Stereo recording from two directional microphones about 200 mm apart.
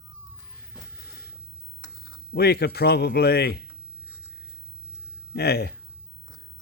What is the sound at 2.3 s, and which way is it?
A man's voice, 55° left (ahead or behind).